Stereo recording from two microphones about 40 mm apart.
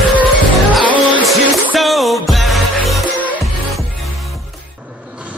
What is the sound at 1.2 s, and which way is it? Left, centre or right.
Music, centre.